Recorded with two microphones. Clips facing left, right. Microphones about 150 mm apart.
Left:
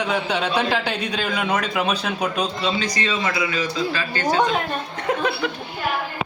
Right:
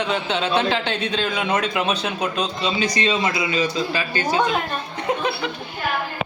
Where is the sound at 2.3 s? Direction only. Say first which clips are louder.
Even; 10° left (ahead or behind).